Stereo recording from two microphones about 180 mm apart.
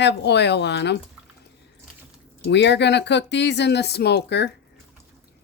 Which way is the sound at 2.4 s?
75° left (ahead or behind).